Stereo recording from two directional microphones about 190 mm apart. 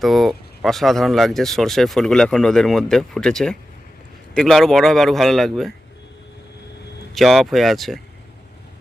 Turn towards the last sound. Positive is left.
turn(degrees=0)  # may be behind; listen again after turning